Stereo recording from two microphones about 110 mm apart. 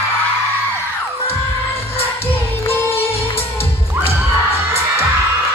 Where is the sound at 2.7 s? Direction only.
20° left (ahead or behind).